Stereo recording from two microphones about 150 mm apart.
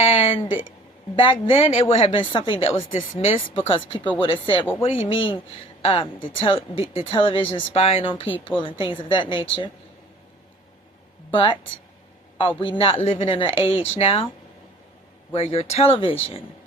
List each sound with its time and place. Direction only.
0.0 s a woman's voice: 40° left (ahead or behind)
11.3 s speech: 35° left (ahead or behind)
15.3 s speech: 40° left (ahead or behind)